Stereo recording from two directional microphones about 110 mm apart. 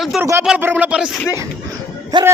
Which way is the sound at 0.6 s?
20° right (ahead or behind).